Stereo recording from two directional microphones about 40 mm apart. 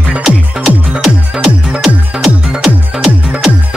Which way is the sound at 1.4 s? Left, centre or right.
Right.